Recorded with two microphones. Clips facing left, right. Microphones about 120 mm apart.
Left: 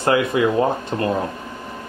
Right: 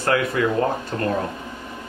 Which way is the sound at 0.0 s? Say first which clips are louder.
Left 3 dB; 20° left (ahead or behind).